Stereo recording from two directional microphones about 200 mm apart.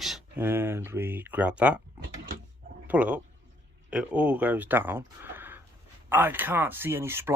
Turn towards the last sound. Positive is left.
turn(degrees=-10)  # may be behind; listen again after turning